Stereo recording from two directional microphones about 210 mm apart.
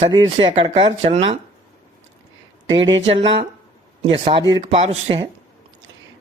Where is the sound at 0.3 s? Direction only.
25° right (ahead or behind).